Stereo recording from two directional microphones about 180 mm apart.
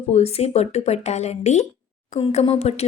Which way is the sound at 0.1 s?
35° left (ahead or behind).